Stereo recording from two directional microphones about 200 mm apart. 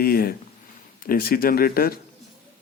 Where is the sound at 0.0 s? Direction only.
50° left (ahead or behind).